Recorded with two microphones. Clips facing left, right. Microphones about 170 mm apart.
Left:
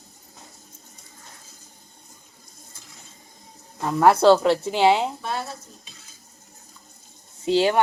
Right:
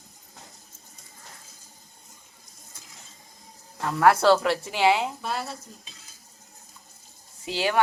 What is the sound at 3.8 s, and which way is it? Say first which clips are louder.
Speech: left 3 dB; 20° left (ahead or behind).